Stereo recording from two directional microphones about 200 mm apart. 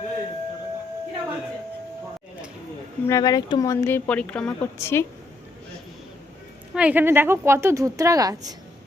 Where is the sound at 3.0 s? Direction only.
15° left (ahead or behind).